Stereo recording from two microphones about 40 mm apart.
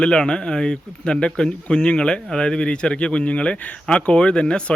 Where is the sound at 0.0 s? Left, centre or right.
Left.